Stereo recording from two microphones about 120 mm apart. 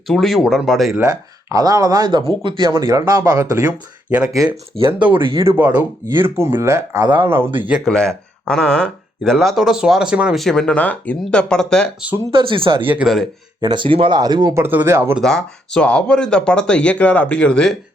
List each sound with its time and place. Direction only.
0.1 s speech: centre (ahead or behind)
1.0 s speech: 30° right (ahead or behind)
3.7 s speech: 10° right (ahead or behind)
4.7 s speech: 40° right (ahead or behind)
5.5 s speech: 15° right (ahead or behind)
7.9 s speech: 5° left (ahead or behind)
10.4 s speech: 5° left (ahead or behind)
12.3 s speech: 45° right (ahead or behind)
12.8 s speech: 15° right (ahead or behind)
13.6 s speech: 40° right (ahead or behind)
14.5 s speech: 15° right (ahead or behind)
15.2 s speech: 5° left (ahead or behind)